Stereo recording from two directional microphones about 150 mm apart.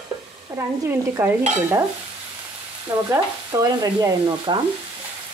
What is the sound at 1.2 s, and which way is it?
Stir, 15° right (ahead or behind).